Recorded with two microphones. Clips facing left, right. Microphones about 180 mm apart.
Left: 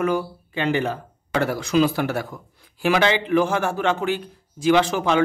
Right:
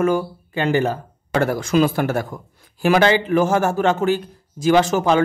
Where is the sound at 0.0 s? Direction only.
45° right (ahead or behind).